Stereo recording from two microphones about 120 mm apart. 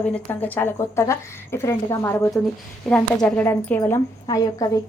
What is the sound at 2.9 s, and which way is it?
A woman's voice, 10° left (ahead or behind).